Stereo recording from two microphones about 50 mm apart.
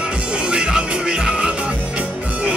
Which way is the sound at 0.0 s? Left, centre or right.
Centre.